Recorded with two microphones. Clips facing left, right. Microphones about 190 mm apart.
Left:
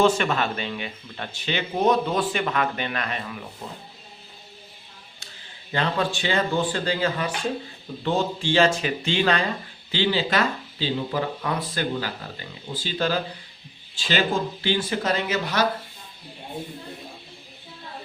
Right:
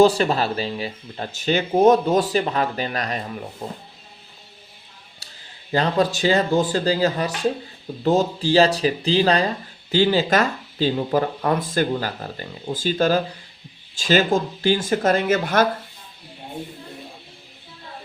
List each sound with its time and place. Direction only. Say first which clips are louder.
0.0 s speech: right 5 dB; 35° right (ahead or behind)
5.2 s a sound: left 1 dB; 35° right (ahead or behind)
5.7 s speech: right 5 dB; 40° right (ahead or behind)